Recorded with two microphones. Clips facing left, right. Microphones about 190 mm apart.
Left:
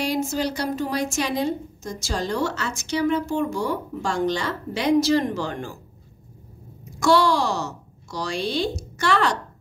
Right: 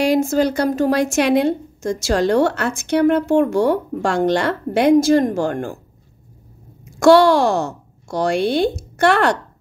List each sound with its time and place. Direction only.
0.1 s a woman's voice: 50° right (ahead or behind)
0.9 s a woman's voice: 70° right (ahead or behind); by 5.8 s 55° right (ahead or behind)
6.8 s speech: 70° right (ahead or behind)